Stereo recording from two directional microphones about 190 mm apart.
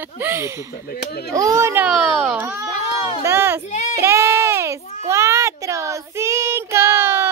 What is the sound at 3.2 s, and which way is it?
Speech, 15° right (ahead or behind).